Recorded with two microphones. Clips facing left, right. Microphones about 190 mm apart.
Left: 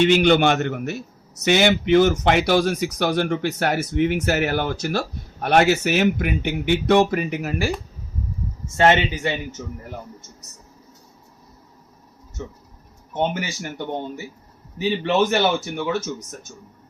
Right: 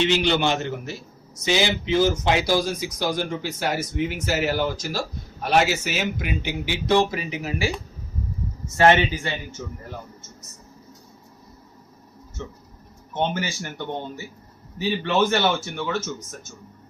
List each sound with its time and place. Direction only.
0.0 s speech: 50° left (ahead or behind)
8.8 s speech: 20° left (ahead or behind)
13.1 s speech: 15° left (ahead or behind)
15.3 s speech: 15° left (ahead or behind)